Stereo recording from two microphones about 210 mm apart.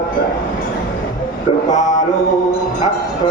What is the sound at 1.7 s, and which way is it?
Mantra, 35° left (ahead or behind).